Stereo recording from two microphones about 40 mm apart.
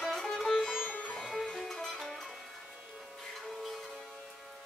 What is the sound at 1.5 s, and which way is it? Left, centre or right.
Music, centre.